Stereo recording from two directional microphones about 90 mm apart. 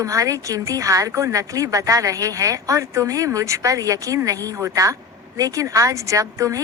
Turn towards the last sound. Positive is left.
turn(degrees=-35)  # may be behind; listen again after turning